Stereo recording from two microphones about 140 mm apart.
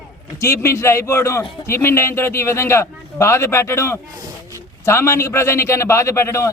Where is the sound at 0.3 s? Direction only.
20° left (ahead or behind).